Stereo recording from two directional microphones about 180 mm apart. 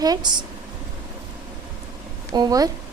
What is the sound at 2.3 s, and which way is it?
Speech, 20° right (ahead or behind).